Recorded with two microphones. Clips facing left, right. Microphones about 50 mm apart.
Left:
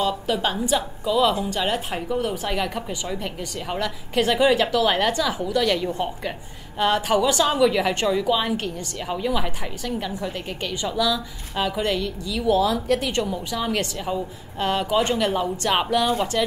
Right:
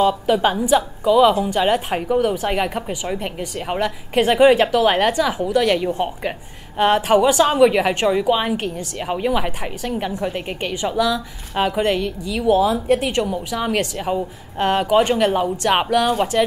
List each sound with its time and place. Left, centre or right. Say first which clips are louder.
0.4 s a woman's voice: right 6 dB; right
13.9 s a woman's voice: right 4 dB; right